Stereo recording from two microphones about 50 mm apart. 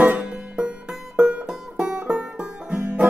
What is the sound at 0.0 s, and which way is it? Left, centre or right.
Music, right.